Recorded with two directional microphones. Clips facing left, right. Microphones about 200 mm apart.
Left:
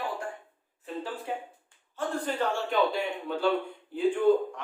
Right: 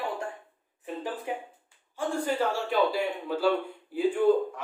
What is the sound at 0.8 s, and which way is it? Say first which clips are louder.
A woman's voice: right 1 dB; 15° right (ahead or behind).